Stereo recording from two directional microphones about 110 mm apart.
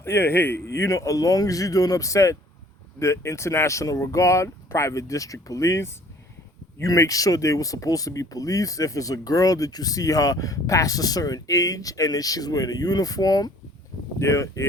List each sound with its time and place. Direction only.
0.0 s speech: 20° left (ahead or behind)